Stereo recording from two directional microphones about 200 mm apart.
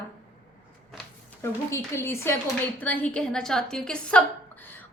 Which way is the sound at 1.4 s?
15° left (ahead or behind).